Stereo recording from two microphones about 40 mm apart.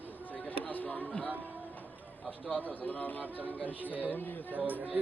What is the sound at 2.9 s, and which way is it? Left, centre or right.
Speech, left.